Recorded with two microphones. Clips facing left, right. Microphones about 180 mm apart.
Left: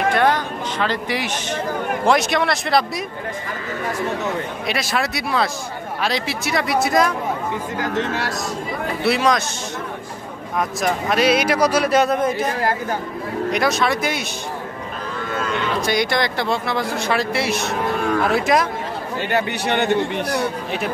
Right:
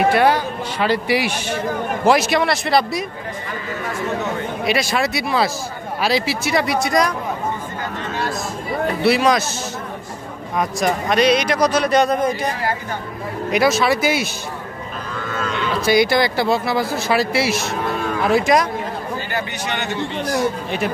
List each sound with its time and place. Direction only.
0.1 s speech: 10° right (ahead or behind)
4.6 s speech: centre (ahead or behind)
7.8 s speech: 80° left
9.0 s speech: centre (ahead or behind)
10.6 s speech: centre (ahead or behind)
13.5 s speech: 5° right (ahead or behind)
15.8 s speech: 5° right (ahead or behind)
19.3 s a man's voice: 60° left (ahead or behind)